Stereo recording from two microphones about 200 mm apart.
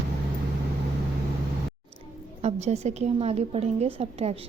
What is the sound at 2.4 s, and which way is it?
A woman's voice, 35° right (ahead or behind).